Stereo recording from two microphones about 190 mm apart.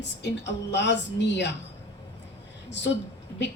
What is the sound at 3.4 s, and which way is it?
Speech, 65° left (ahead or behind).